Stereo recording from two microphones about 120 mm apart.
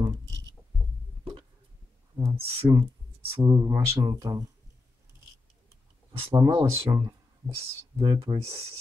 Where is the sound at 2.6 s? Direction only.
25° right (ahead or behind).